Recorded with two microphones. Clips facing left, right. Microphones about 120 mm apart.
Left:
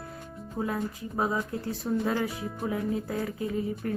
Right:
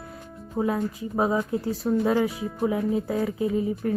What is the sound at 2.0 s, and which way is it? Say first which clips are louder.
Speech: right 7 dB; 5° right (ahead or behind).